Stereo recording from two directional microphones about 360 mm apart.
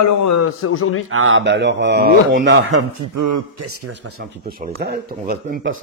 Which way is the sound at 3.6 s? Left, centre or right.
Right.